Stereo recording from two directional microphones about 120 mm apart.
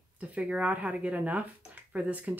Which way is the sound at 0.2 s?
10° right (ahead or behind).